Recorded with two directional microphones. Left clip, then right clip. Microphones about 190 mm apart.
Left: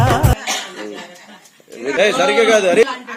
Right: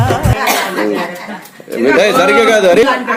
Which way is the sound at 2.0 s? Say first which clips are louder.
Right 2 dB; 5° right (ahead or behind).